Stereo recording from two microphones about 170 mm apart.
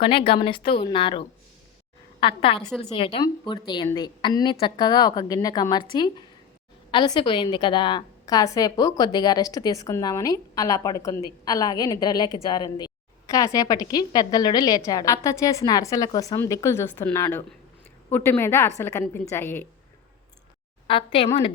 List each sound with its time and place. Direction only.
0.0 s a woman's voice: 30° left (ahead or behind)
2.2 s a woman's voice: 30° left (ahead or behind); by 19.6 s 15° left (ahead or behind)
20.8 s a woman's voice: 30° left (ahead or behind)